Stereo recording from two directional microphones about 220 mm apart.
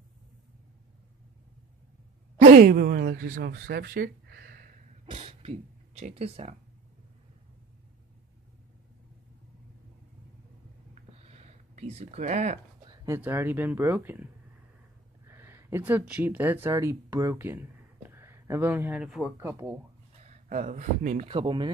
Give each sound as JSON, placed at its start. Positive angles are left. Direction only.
{"t": 2.5, "sound": "speech", "side_deg": -45}
{"t": 5.0, "sound": "speech", "side_deg": -25}
{"t": 11.2, "sound": "a sound", "side_deg": -30}
{"t": 12.8, "sound": "speech", "side_deg": -15}
{"t": 20.2, "sound": "speech", "side_deg": -35}